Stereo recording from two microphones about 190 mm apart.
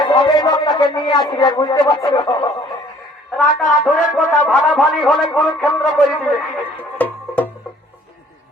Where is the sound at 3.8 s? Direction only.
5° left (ahead or behind).